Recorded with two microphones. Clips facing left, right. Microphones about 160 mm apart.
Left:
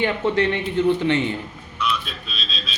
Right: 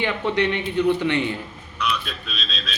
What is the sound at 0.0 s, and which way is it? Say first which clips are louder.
Speech: left 2 dB; 40° left (ahead or behind).